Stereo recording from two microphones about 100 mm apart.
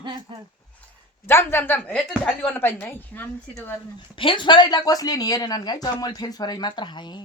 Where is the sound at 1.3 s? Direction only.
25° left (ahead or behind).